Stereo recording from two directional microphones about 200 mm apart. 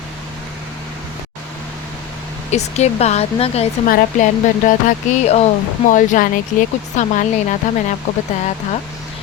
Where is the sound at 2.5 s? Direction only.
35° left (ahead or behind).